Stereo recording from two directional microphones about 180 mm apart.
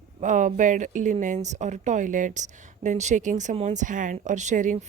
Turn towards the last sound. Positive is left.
turn(degrees=-45)  # may be behind; listen again after turning